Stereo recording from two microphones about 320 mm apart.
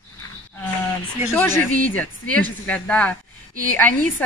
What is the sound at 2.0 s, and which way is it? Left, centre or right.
A woman's voice, centre.